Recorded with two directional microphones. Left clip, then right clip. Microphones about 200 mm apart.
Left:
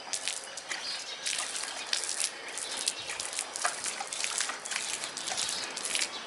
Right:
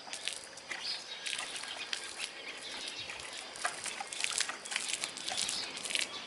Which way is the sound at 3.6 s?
Centre (ahead or behind).